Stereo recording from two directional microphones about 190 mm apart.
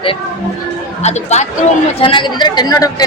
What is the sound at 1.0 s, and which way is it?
A woman's voice, 35° left (ahead or behind).